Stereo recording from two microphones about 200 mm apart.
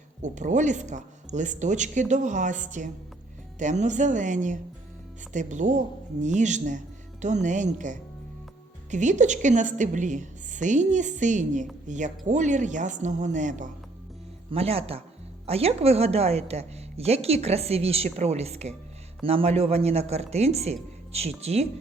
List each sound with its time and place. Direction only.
0.2 s a woman's voice: 35° right (ahead or behind)